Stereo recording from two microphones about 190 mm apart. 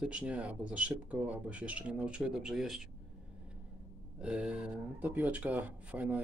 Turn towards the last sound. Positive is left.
turn(degrees=-10)  # may be behind; listen again after turning